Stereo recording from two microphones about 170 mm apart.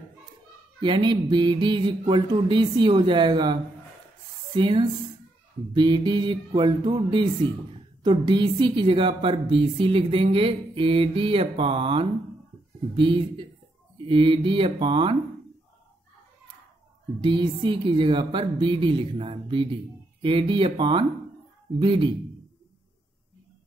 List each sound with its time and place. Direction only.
0.7 s mantra: 25° right (ahead or behind)
4.6 s mantra: 30° right (ahead or behind)
8.0 s a woman's voice: 25° right (ahead or behind)
12.9 s mantra: 30° right (ahead or behind)
13.9 s a woman's voice: 30° right (ahead or behind)
17.2 s mantra: 30° right (ahead or behind)